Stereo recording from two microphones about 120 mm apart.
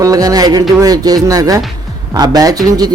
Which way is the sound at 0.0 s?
30° right (ahead or behind).